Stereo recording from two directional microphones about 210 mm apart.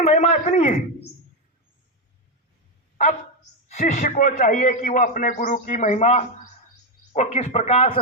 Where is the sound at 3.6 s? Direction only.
35° left (ahead or behind).